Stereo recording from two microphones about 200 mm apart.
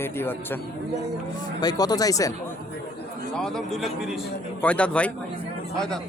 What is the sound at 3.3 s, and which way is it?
A man's voice, centre (ahead or behind).